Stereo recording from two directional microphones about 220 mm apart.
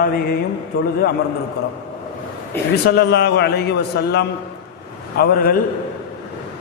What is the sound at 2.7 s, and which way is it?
A man's voice, 50° left (ahead or behind).